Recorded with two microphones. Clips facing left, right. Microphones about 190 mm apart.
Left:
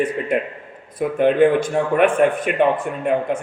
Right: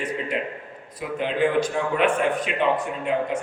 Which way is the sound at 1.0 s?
55° left (ahead or behind).